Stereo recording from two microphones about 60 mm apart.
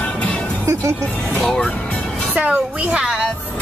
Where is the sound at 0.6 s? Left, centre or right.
Right.